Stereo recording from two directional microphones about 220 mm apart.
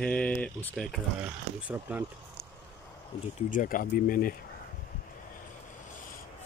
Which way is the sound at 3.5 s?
40° left (ahead or behind).